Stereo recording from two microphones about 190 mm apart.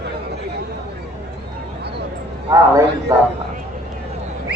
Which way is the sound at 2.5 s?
20° right (ahead or behind).